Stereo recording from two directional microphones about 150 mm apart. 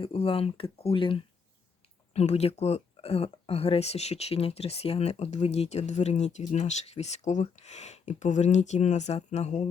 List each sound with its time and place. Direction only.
0.0 s speech: 35° left (ahead or behind)